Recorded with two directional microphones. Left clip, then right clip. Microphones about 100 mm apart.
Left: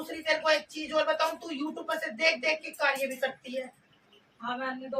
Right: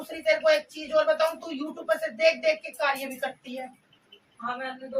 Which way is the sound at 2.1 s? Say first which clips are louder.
Right 3 dB; 15° left (ahead or behind).